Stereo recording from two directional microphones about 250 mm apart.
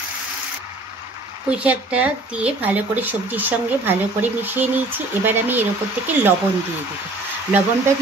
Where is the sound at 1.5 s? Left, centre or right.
Centre.